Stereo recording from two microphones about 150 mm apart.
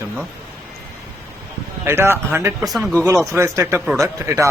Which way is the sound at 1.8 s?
15° right (ahead or behind).